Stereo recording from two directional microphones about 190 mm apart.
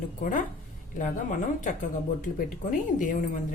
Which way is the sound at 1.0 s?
40° left (ahead or behind).